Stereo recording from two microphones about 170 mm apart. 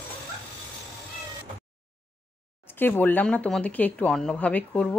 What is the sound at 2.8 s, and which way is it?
Speech, 10° left (ahead or behind).